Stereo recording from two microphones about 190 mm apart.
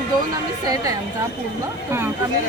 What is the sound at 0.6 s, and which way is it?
Speech, 20° right (ahead or behind).